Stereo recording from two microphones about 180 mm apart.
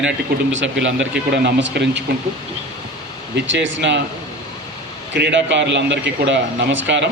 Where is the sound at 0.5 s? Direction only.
90° right.